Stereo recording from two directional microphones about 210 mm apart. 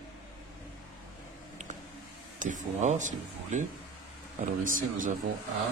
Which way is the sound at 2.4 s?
35° right (ahead or behind).